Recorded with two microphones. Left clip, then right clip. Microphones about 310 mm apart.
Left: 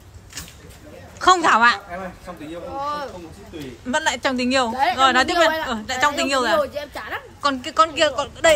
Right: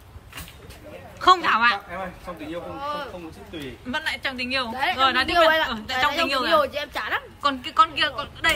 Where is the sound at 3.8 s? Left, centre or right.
Centre.